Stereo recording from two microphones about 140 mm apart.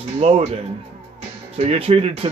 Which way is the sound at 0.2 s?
50° right (ahead or behind).